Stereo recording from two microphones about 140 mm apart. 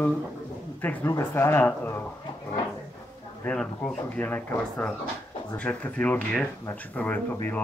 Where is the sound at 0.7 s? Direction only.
15° left (ahead or behind).